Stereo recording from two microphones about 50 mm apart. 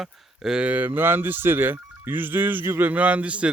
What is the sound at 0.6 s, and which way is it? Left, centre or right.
A man's voice, right.